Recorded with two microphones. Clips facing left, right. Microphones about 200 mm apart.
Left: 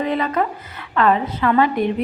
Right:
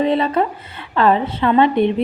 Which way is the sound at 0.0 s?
30° right (ahead or behind).